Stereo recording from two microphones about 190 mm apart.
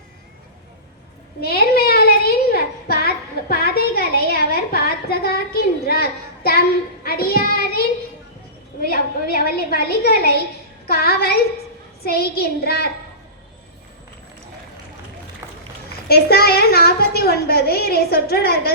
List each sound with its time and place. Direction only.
1.4 s a sound: 55° left (ahead or behind)
7.0 s a child's voice: 55° left (ahead or behind)
16.0 s a child's voice: 55° left (ahead or behind)